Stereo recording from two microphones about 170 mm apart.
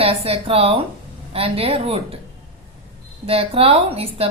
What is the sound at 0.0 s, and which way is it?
Speech, 35° right (ahead or behind).